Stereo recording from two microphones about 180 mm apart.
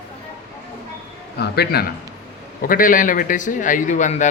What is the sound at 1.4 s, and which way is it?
Speech, 60° left (ahead or behind).